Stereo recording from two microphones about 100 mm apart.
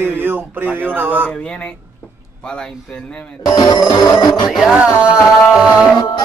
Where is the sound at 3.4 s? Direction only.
45° left (ahead or behind).